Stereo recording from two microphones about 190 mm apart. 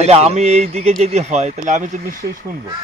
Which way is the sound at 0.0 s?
35° right (ahead or behind).